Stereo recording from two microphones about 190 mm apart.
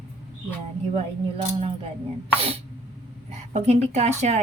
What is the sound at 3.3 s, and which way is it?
Speech, 35° right (ahead or behind).